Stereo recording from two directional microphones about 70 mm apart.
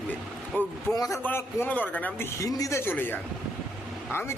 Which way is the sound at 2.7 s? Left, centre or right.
Left.